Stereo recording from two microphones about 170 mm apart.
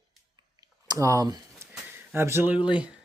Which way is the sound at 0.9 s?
20° right (ahead or behind).